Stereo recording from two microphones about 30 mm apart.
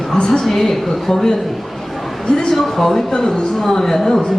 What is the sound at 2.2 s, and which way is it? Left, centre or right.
Speech, left.